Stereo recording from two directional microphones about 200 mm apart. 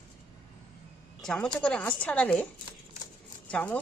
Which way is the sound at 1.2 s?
5° left (ahead or behind).